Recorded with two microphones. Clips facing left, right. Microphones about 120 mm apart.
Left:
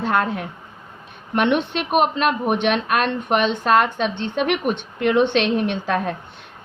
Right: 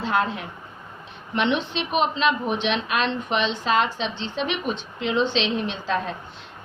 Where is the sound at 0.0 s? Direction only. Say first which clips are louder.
Left 3 dB; 55° left (ahead or behind).